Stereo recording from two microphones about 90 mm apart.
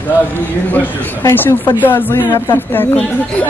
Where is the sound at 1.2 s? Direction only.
25° left (ahead or behind).